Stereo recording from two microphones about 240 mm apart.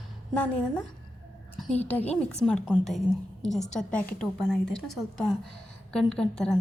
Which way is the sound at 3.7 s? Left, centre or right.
Centre.